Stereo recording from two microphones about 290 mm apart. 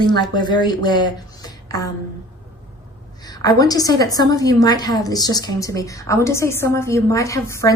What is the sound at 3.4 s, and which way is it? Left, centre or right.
A woman's voice, centre.